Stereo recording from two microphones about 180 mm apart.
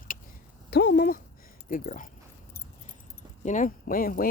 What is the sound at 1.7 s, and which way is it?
Speech, 45° left (ahead or behind).